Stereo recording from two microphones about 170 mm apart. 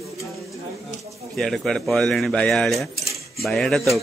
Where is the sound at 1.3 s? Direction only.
5° left (ahead or behind).